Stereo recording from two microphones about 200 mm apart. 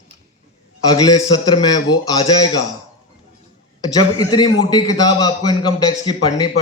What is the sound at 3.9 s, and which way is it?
Speech, 20° left (ahead or behind).